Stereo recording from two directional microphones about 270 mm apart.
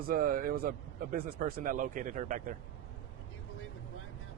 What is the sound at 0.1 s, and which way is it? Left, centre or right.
Speech, right.